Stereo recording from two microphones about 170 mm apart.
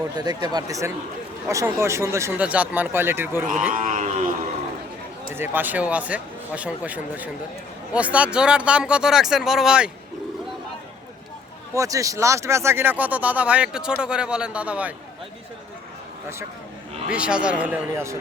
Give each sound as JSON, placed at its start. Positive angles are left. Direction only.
{"t": 0.2, "sound": "speech", "side_deg": -25}
{"t": 3.8, "sound": "a sound", "side_deg": -45}
{"t": 5.3, "sound": "speech", "side_deg": -10}
{"t": 11.7, "sound": "speech", "side_deg": -20}
{"t": 17.1, "sound": "speech", "side_deg": -5}